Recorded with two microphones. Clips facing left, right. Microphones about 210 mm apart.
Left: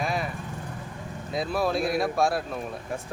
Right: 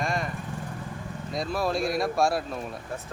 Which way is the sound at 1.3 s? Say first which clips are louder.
Left 2 dB; centre (ahead or behind).